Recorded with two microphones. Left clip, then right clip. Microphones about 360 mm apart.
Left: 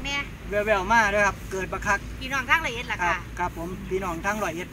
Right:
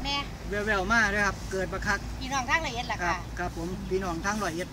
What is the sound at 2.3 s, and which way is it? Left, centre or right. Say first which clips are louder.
Speech: left 4 dB; centre.